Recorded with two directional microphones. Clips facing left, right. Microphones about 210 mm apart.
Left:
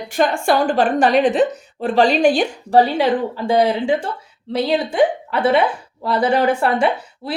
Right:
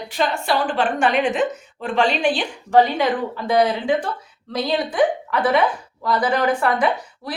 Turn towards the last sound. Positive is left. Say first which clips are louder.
# left 2 dB
turn(degrees=25)  # may be behind; listen again after turning